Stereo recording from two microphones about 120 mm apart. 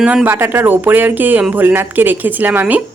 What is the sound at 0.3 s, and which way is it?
A woman's voice, 20° right (ahead or behind).